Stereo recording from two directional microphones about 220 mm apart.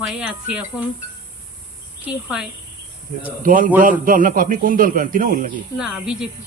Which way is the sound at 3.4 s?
40° right (ahead or behind).